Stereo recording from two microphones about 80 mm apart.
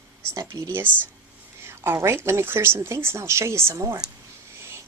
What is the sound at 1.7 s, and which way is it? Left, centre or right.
A woman's voice, right.